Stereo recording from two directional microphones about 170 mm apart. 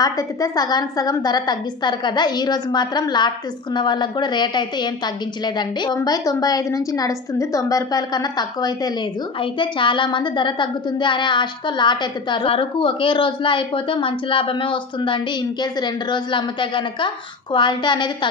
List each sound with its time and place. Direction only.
0.0 s a woman's voice: 20° left (ahead or behind)